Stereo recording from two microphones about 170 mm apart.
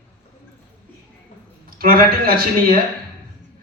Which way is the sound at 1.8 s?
60° right (ahead or behind).